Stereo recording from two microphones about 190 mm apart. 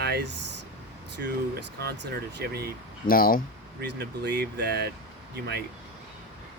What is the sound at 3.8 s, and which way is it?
Speech, 60° right (ahead or behind).